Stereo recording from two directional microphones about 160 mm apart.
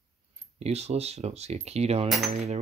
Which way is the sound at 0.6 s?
40° right (ahead or behind).